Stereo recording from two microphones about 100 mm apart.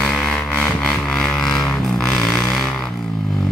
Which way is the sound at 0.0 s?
5° left (ahead or behind).